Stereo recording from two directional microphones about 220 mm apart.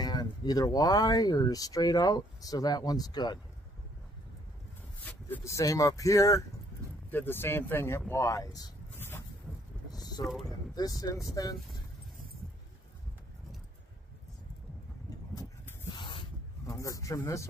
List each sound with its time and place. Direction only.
0.0 s speech: 20° left (ahead or behind)
5.0 s speech: 10° left (ahead or behind)
8.1 s vehicle: 15° left (ahead or behind)
9.9 s a sound: 15° left (ahead or behind)
10.7 s speech: 15° left (ahead or behind)
15.3 s spray: 15° left (ahead or behind)